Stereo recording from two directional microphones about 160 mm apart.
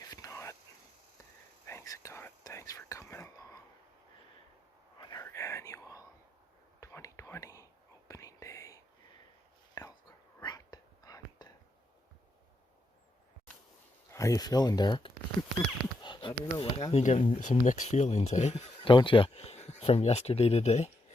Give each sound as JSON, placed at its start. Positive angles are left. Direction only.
{"t": 0.0, "sound": "whispering", "side_deg": 20}
{"t": 1.6, "sound": "whispering", "side_deg": 20}
{"t": 4.9, "sound": "a sound", "side_deg": 25}
{"t": 5.2, "sound": "whispering", "side_deg": 20}
{"t": 14.1, "sound": "speech", "side_deg": 20}
{"t": 16.0, "sound": "a sound", "side_deg": 30}
{"t": 16.4, "sound": "speech", "side_deg": 35}